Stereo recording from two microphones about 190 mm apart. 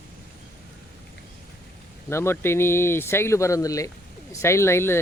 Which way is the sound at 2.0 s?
15° left (ahead or behind).